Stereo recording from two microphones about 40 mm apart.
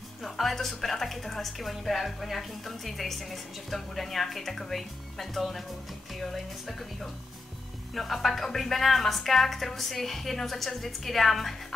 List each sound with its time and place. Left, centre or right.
0.2 s a woman's voice: centre